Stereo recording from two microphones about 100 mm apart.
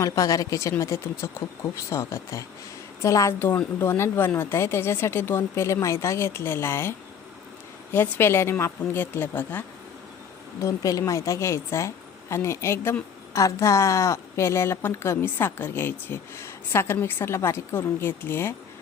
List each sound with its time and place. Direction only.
0.0 s a woman's voice: 35° left (ahead or behind)
7.9 s speech: 20° left (ahead or behind)
10.6 s a woman's voice: 35° left (ahead or behind)